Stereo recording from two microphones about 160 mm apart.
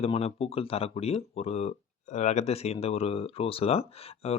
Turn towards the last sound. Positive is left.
turn(degrees=40)  # may be behind; listen again after turning